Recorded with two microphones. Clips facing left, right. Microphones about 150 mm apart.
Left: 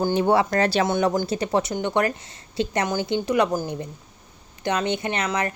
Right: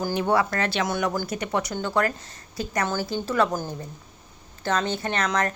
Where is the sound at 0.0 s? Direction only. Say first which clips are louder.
Left 3 dB; 30° left (ahead or behind).